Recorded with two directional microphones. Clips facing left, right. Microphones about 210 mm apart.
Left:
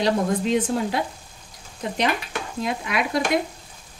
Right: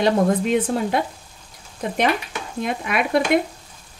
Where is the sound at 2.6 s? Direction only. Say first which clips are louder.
Right 3 dB; 55° right (ahead or behind).